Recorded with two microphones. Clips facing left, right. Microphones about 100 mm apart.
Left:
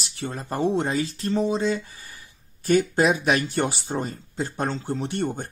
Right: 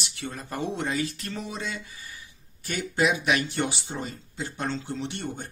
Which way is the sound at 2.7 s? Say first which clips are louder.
Left 6 dB; 40° left (ahead or behind).